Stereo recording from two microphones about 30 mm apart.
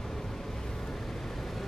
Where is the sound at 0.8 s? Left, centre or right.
Centre.